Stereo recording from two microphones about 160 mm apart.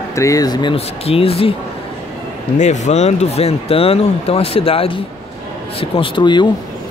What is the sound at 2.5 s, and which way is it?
Speech, 45° left (ahead or behind).